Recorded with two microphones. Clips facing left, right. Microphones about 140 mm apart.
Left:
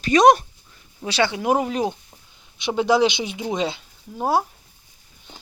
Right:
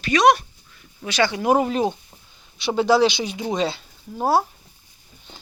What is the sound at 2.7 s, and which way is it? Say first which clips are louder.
Speech: right 1 dB; 15° left (ahead or behind).